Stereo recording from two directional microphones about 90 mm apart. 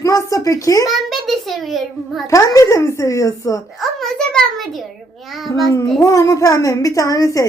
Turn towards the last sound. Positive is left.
turn(degrees=40)  # may be behind; listen again after turning